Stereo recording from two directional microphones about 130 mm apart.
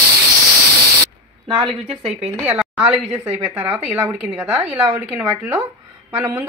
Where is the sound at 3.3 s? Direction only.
15° right (ahead or behind).